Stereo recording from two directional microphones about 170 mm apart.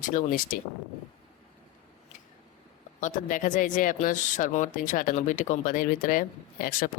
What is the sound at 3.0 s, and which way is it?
Speech, 50° left (ahead or behind).